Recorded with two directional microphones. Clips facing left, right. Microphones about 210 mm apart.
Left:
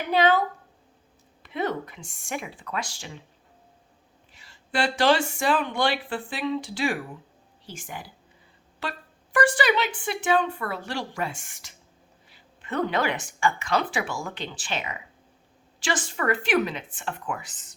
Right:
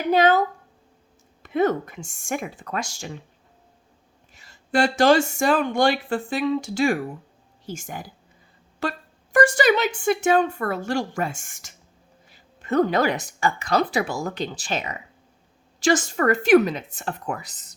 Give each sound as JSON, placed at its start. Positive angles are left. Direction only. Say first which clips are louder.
{"t": 0.1, "sound": "a woman's voice", "louder": "right 3 dB", "side_deg": -45}
{"t": 4.3, "sound": "a woman's voice", "louder": "right 7 dB", "side_deg": -45}